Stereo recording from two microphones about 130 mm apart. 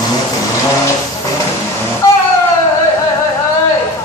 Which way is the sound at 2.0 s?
25° left (ahead or behind).